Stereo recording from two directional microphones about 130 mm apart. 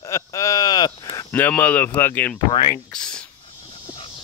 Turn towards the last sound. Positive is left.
turn(degrees=5)  # may be behind; listen again after turning